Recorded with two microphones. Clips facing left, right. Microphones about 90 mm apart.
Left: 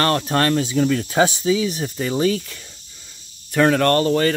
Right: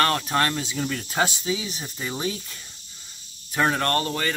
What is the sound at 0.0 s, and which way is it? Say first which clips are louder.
Speech: left 4 dB; 40° left (ahead or behind).